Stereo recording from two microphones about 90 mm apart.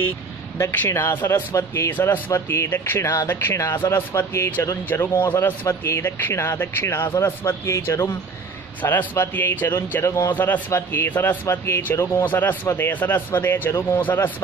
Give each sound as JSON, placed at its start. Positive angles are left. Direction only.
{"t": 0.6, "sound": "a man's voice", "side_deg": 30}
{"t": 3.5, "sound": "a man's voice", "side_deg": 35}
{"t": 10.3, "sound": "a man's voice", "side_deg": 20}